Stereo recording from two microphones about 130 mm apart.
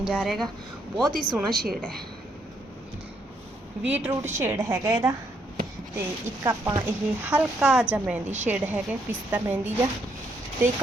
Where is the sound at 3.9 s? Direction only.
15° right (ahead or behind).